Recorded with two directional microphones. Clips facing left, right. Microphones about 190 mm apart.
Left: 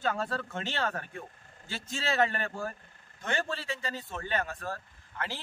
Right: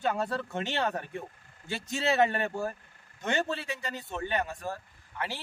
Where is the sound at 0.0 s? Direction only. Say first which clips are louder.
Right 2 dB; 15° right (ahead or behind).